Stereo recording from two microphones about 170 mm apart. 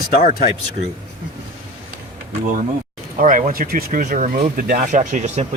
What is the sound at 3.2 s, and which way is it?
Speech, 50° right (ahead or behind).